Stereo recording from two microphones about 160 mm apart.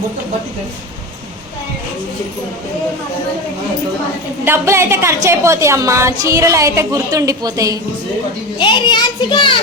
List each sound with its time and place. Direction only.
4.4 s a woman's voice: 15° right (ahead or behind)
8.5 s a child's voice: 30° left (ahead or behind)